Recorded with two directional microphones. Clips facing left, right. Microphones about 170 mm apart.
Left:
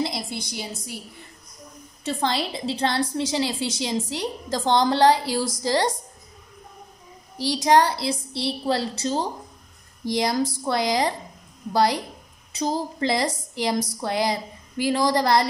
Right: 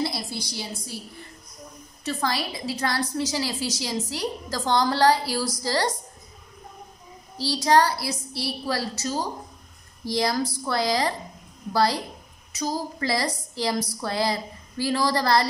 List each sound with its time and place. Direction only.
0.0 s a woman's voice: 20° left (ahead or behind)
2.0 s a woman's voice: 25° left (ahead or behind)
7.3 s a woman's voice: 20° left (ahead or behind)